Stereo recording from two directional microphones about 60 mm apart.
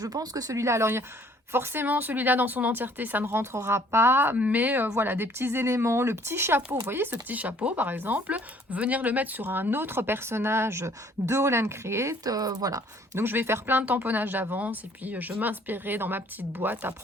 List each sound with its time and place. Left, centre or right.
0.0 s speech: right
3.3 s speech: right
12.2 s speech: right
13.1 s speech: right